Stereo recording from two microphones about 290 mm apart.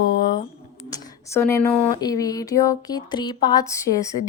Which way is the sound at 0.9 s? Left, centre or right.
Centre.